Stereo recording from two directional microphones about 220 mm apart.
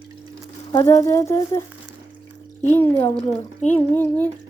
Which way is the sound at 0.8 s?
15° left (ahead or behind).